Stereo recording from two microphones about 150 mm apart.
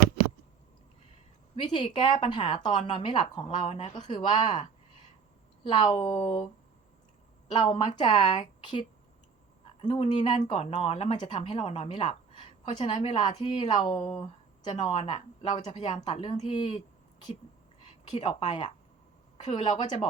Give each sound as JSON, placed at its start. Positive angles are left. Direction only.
{"t": 1.6, "sound": "a woman's voice", "side_deg": 30}
{"t": 5.8, "sound": "a woman's voice", "side_deg": 40}
{"t": 7.5, "sound": "a woman's voice", "side_deg": 35}
{"t": 9.8, "sound": "a woman's voice", "side_deg": 45}
{"t": 15.7, "sound": "a woman's voice", "side_deg": 45}
{"t": 18.1, "sound": "speech", "side_deg": 40}
{"t": 19.5, "sound": "a woman's voice", "side_deg": 35}